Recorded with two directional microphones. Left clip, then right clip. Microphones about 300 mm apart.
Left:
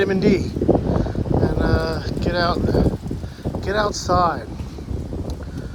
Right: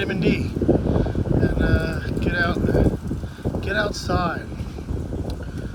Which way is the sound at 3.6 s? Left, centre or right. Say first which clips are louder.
Left 3 dB; centre.